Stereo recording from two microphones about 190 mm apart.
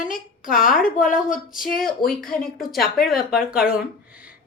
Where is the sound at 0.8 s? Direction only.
45° left (ahead or behind).